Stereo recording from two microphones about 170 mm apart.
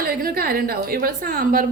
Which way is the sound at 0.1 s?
60° right (ahead or behind).